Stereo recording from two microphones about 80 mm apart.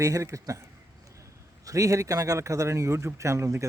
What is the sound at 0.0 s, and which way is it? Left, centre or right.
Speech, right.